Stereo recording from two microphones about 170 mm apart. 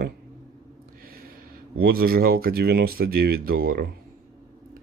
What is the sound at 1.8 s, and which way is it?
Speech, 60° right (ahead or behind).